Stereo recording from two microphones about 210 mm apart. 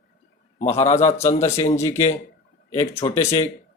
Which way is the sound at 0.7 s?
30° left (ahead or behind).